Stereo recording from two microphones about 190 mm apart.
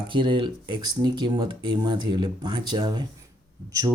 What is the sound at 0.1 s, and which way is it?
Speech, 25° right (ahead or behind).